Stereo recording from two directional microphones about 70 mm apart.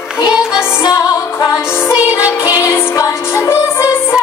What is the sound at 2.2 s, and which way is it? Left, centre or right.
Music, left.